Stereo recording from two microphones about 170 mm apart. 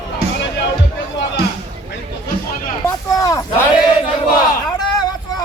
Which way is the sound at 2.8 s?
20° left (ahead or behind).